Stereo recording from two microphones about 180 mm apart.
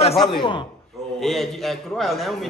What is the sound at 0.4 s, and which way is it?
Speech, 25° left (ahead or behind).